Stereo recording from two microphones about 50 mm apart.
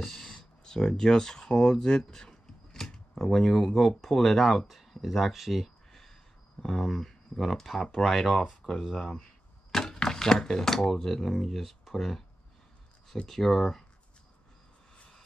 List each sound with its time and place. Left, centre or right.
0.0 s speech: centre
5.9 s a sound: centre
6.6 s speech: centre
8.6 s speech: centre
9.7 s speech: centre
13.3 s speech: centre